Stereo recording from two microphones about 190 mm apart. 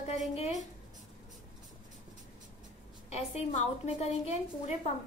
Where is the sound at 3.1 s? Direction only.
35° left (ahead or behind).